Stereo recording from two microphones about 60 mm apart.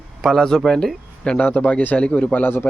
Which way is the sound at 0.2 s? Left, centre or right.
Centre.